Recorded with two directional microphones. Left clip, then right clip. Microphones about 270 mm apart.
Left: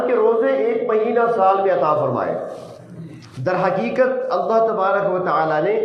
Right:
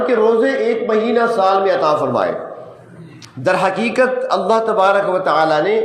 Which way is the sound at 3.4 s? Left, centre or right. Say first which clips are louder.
Right 4 dB; right.